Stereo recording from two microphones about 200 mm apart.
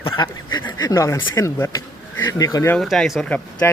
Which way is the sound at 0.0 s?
20° left (ahead or behind).